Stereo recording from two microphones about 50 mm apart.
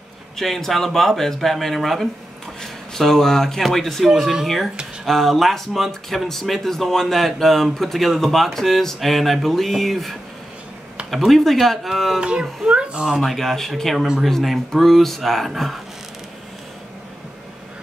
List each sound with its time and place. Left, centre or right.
0.4 s speech: centre
5.0 s speech: centre
12.2 s speech: centre
13.2 s speech: centre